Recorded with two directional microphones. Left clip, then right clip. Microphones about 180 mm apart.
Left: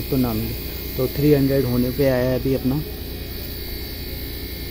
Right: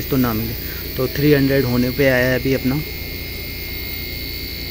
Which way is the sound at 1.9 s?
5° left (ahead or behind).